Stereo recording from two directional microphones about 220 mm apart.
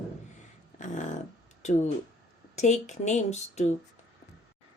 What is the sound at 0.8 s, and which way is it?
Dog, 35° left (ahead or behind).